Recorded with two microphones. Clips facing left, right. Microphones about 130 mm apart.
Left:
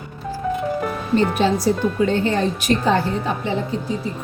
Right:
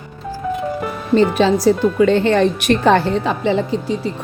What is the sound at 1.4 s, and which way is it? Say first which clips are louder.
A woman's voice: right 5 dB; 90° right.